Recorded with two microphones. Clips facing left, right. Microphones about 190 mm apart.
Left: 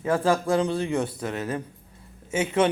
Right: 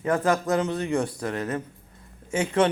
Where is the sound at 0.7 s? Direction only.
25° left (ahead or behind).